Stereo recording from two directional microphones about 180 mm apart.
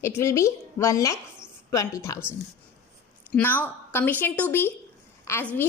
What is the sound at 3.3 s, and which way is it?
A woman's voice, 10° left (ahead or behind).